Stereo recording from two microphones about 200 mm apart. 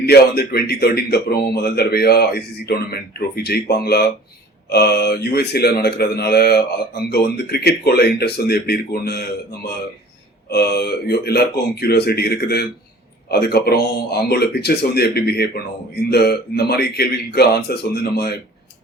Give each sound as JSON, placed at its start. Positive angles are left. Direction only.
{"t": 0.0, "sound": "speech", "side_deg": 55}
{"t": 10.5, "sound": "speech", "side_deg": 55}